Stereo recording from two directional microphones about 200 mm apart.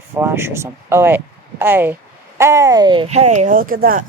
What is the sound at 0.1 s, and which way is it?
Speech, 10° right (ahead or behind).